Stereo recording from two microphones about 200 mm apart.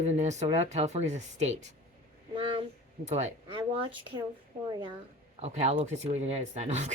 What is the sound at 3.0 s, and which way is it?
Speech, 35° right (ahead or behind).